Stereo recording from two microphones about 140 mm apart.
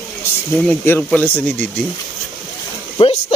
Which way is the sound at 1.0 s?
10° left (ahead or behind).